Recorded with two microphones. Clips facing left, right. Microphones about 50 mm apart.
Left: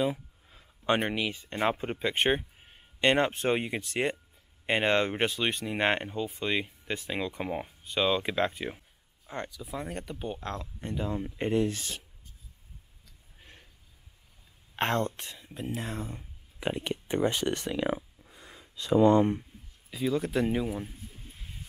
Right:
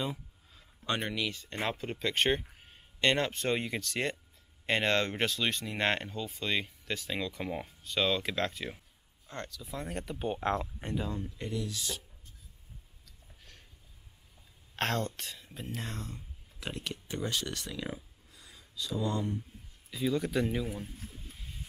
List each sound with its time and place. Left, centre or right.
0.1 s a sound: left
1.6 s speech: left
9.7 s speech: centre
10.4 s speech: right
10.8 s speech: centre
11.1 s speech: left
11.3 s speech: left
13.4 s a sound: left
14.8 s speech: centre
16.2 s speech: left
17.9 s a sound: left
19.9 s speech: centre